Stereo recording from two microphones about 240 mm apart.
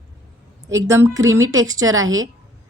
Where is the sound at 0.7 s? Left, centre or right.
Centre.